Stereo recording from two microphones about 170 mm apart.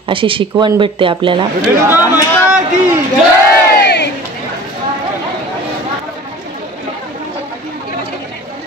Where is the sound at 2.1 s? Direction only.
5° right (ahead or behind).